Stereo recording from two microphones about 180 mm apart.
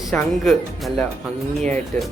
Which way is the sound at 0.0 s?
Centre (ahead or behind).